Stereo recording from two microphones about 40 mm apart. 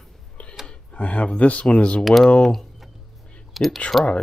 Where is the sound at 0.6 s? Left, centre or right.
Left.